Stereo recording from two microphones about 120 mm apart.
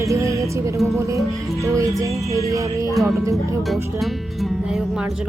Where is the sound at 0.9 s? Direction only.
25° right (ahead or behind).